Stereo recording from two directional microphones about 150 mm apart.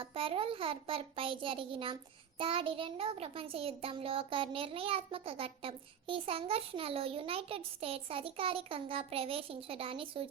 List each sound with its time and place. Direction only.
0.0 s a child's voice: 35° right (ahead or behind)